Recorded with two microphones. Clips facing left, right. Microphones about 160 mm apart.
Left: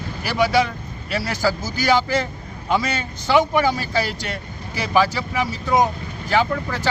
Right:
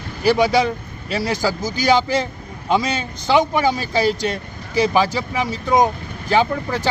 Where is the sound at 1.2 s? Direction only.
20° right (ahead or behind).